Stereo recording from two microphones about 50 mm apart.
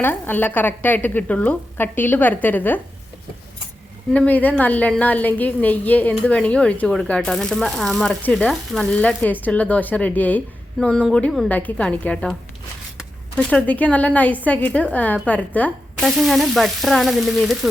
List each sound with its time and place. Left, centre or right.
0.0 s speech: left
1.8 s speech: left
4.3 s speech: left
7.2 s frying: centre
8.3 s speech: centre
8.8 s frying: left
9.5 s speech: left
10.8 s speech: centre
11.4 s speech: left
11.8 s frying: left
13.3 s speech: left
16.1 s frying: centre